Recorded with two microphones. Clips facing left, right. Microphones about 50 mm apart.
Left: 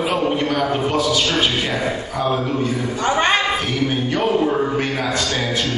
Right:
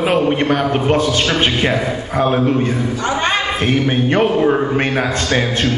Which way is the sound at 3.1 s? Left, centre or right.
Centre.